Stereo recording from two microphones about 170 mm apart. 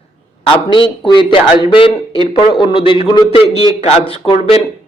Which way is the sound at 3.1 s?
25° left (ahead or behind).